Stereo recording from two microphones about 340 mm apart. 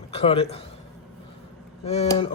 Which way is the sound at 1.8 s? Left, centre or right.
Centre.